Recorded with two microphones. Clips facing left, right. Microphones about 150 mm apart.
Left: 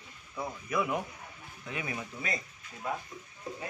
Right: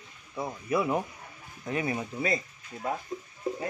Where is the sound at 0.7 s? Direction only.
35° right (ahead or behind).